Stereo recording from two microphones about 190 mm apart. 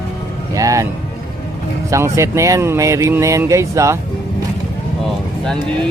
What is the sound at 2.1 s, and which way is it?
Speech, 15° right (ahead or behind).